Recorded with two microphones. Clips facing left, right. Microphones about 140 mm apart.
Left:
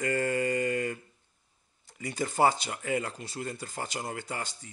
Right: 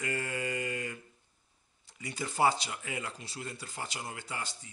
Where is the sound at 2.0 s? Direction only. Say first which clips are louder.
Left 4 dB; 50° left (ahead or behind).